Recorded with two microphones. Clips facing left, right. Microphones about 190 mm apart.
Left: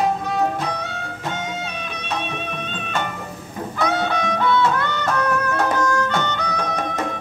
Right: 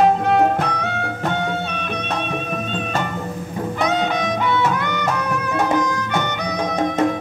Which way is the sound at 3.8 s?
20° right (ahead or behind).